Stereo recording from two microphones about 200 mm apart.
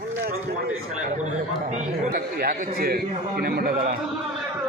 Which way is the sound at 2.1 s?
50° right (ahead or behind).